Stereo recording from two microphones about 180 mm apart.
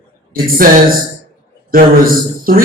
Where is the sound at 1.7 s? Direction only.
55° right (ahead or behind).